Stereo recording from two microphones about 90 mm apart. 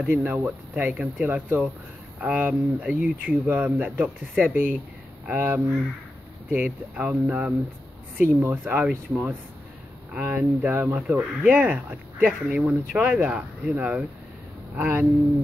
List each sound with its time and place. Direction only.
0.0 s speech: 15° right (ahead or behind)